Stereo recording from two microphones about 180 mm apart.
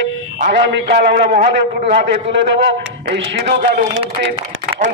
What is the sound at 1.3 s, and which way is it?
Speech, 50° right (ahead or behind).